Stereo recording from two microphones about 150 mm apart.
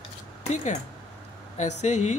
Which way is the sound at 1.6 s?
50° left (ahead or behind).